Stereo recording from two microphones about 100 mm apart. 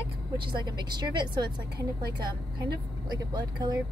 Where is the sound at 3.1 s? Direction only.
45° right (ahead or behind).